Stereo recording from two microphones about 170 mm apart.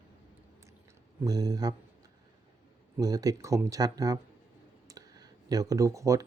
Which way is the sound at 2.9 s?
20° right (ahead or behind).